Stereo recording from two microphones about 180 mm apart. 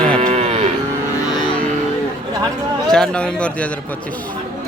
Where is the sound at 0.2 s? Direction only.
35° right (ahead or behind).